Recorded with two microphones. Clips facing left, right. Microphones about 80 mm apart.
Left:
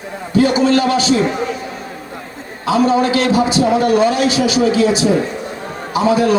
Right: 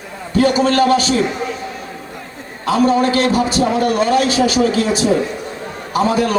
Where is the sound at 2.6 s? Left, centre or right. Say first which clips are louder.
Even; right.